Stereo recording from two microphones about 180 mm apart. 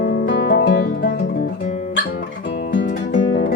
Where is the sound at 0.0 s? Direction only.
65° left (ahead or behind).